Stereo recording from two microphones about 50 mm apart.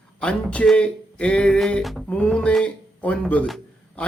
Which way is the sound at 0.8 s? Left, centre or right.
Left.